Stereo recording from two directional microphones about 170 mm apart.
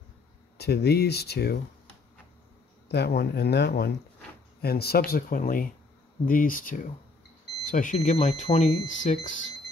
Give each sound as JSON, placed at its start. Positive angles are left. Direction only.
{"t": 0.6, "sound": "speech", "side_deg": 70}
{"t": 2.9, "sound": "speech", "side_deg": 70}